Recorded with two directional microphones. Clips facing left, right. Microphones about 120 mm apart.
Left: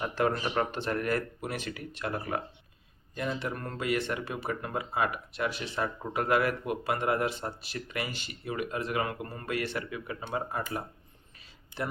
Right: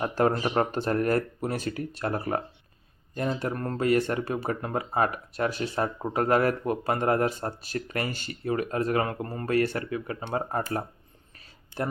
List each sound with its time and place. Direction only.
0.0 s speech: 40° right (ahead or behind)